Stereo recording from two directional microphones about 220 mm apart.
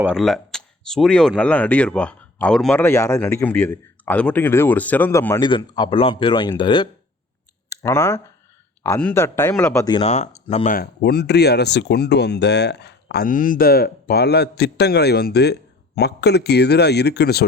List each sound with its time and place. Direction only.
0.0 s speech: centre (ahead or behind)
9.9 s speech: 30° left (ahead or behind)
10.8 s speech: 45° left (ahead or behind)